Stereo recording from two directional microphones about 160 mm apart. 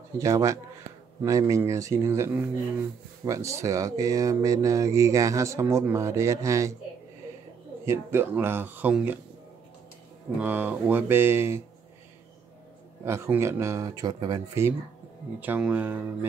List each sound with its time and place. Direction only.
0.2 s speech: 20° right (ahead or behind)
7.8 s speech: 15° right (ahead or behind)
10.4 s speech: 10° right (ahead or behind)
13.0 s speech: 15° right (ahead or behind)
15.4 s speech: 10° right (ahead or behind)